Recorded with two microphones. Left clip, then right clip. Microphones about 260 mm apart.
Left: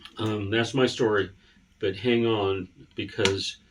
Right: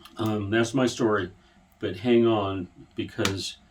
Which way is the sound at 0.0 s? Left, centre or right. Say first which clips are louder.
Right 1 dB; centre.